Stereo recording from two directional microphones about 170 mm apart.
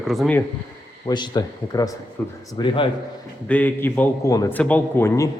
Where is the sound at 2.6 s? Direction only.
30° left (ahead or behind).